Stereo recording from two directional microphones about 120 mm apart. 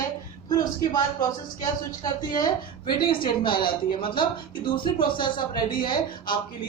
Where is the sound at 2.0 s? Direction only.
35° left (ahead or behind).